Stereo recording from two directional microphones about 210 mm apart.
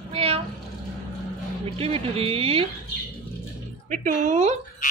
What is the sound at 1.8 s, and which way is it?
Speech, 30° right (ahead or behind).